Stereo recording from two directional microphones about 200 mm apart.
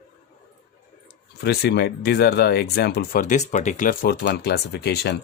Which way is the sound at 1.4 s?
55° left (ahead or behind).